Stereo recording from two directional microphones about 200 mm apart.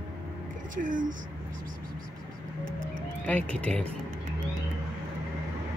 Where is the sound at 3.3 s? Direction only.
10° left (ahead or behind).